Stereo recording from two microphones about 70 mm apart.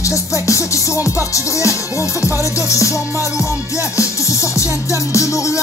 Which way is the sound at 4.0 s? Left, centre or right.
Left.